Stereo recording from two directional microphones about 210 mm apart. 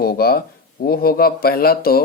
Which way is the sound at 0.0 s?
45° left (ahead or behind).